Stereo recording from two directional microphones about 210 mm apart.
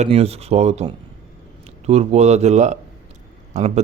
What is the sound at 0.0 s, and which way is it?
A man's voice, 30° right (ahead or behind).